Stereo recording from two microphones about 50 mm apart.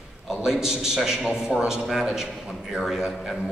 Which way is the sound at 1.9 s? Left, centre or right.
Centre.